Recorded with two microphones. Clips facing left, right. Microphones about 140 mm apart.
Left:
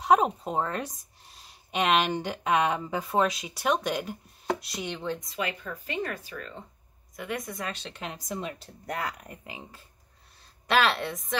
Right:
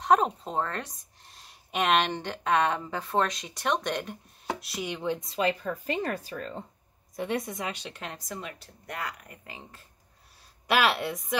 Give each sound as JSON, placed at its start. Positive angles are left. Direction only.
{"t": 0.0, "sound": "speech", "side_deg": 10}
{"t": 5.2, "sound": "a woman's voice", "side_deg": -30}
{"t": 7.9, "sound": "speech", "side_deg": 0}
{"t": 8.3, "sound": "a woman's voice", "side_deg": 25}
{"t": 9.5, "sound": "speech", "side_deg": 5}
{"t": 10.7, "sound": "a woman's voice", "side_deg": -10}